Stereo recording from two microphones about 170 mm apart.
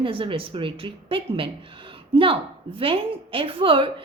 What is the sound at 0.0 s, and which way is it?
A woman's voice, 30° right (ahead or behind).